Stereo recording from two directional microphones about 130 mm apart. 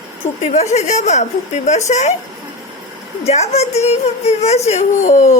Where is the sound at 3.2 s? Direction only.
55° left (ahead or behind).